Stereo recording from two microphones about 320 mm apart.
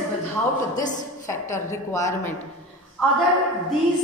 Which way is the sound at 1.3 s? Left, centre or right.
Centre.